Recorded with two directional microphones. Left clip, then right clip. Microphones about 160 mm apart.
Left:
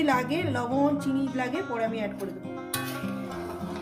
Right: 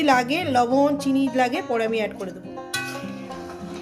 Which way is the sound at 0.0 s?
65° right (ahead or behind).